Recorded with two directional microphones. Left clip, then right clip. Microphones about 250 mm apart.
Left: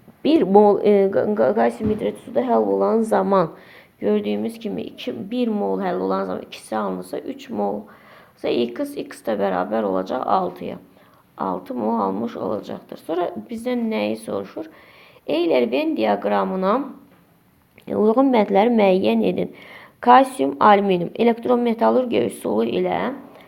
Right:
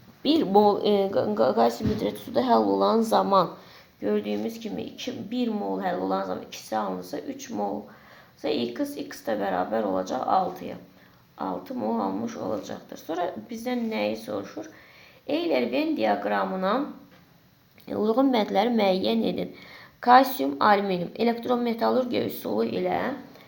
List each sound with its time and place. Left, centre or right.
0.2 s a woman's voice: left
2.5 s speech: centre
4.0 s a woman's voice: left
17.8 s a woman's voice: left